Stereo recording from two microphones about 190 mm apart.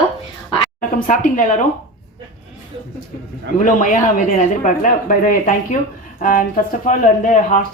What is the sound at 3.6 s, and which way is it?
Speech, 45° left (ahead or behind).